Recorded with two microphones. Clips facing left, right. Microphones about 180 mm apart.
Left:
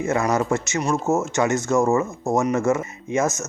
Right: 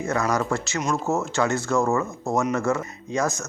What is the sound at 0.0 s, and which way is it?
Speech, 20° left (ahead or behind).